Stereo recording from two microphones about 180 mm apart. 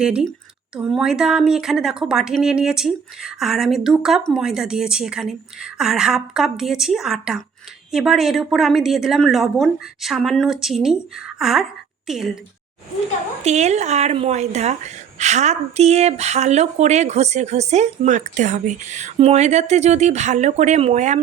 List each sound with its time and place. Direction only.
0.0 s a woman's voice: 5° right (ahead or behind)
13.4 s speech: 40° right (ahead or behind)